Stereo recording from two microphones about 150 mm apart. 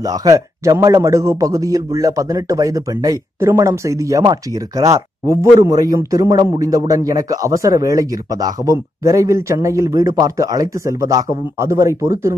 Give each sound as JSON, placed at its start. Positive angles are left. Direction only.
{"t": 0.2, "sound": "speech", "side_deg": -25}